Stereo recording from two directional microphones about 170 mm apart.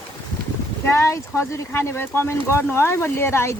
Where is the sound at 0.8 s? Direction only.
15° left (ahead or behind).